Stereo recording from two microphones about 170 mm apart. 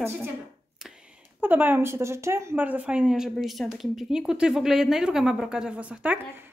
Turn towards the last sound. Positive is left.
turn(degrees=-10)  # may be behind; listen again after turning